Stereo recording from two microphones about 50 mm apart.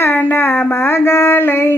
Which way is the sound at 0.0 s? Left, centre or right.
Left.